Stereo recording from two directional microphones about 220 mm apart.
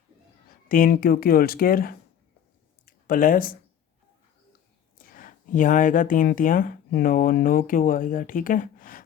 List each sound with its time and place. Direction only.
0.7 s speech: 40° left (ahead or behind)
2.8 s a sound: 40° left (ahead or behind)
4.9 s speech: 40° left (ahead or behind)